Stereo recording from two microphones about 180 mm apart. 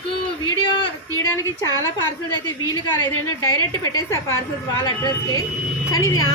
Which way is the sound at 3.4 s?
20° left (ahead or behind).